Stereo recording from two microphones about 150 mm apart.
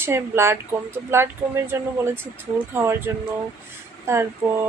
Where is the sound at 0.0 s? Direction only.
15° right (ahead or behind).